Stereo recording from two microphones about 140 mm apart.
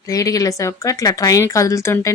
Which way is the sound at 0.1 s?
25° left (ahead or behind).